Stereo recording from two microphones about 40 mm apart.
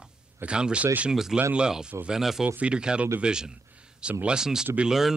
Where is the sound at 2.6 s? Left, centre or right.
Right.